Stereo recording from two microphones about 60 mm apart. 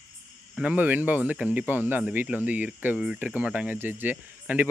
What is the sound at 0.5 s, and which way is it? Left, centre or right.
Speech, right.